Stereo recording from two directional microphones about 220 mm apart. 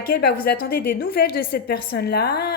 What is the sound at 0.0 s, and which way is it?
A woman's voice, 45° left (ahead or behind).